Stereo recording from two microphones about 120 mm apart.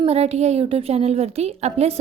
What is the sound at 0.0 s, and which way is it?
A woman's voice, 60° right (ahead or behind).